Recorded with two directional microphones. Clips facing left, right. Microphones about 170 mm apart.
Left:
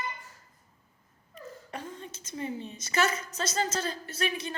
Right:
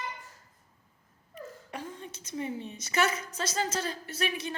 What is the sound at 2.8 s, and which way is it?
Speech, 15° right (ahead or behind).